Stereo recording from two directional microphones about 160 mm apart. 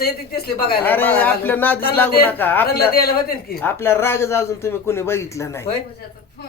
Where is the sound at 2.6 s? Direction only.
75° left (ahead or behind).